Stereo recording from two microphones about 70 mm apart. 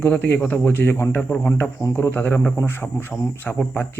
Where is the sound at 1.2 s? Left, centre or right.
Centre.